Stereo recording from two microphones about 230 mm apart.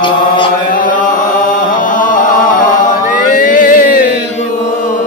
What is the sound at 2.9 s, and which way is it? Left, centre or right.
Chant, left.